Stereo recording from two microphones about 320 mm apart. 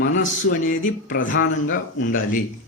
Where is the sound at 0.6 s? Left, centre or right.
Left.